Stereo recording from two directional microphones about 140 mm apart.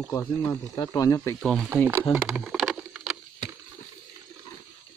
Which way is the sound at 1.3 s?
Centre (ahead or behind).